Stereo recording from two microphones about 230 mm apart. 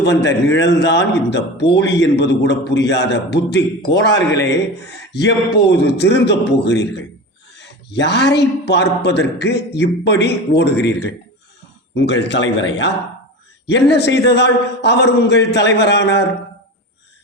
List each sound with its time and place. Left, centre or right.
0.0 s a man's voice: left